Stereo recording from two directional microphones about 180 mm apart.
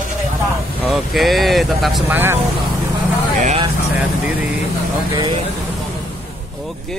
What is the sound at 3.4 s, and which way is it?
Speech, 30° right (ahead or behind).